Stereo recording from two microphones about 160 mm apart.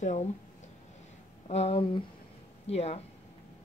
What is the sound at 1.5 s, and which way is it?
Speech, 40° left (ahead or behind).